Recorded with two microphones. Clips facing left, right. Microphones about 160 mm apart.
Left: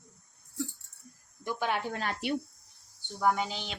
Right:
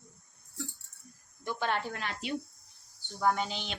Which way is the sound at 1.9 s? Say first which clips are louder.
Left 4 dB; 40° left (ahead or behind).